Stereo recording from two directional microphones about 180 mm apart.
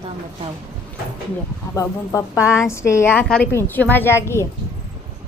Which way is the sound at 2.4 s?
5° right (ahead or behind).